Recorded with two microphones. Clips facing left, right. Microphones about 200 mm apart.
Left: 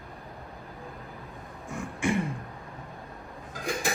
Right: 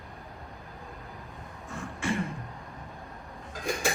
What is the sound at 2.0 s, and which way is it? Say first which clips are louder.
Speech: left 4 dB; 15° left (ahead or behind).